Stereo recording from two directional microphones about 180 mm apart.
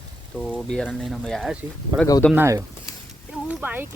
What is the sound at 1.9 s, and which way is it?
Speech, 20° right (ahead or behind).